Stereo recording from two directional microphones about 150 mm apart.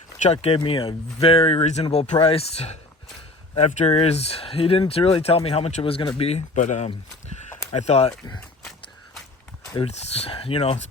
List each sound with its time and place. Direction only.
0.2 s speech: 45° left (ahead or behind)
9.8 s speech: 45° left (ahead or behind)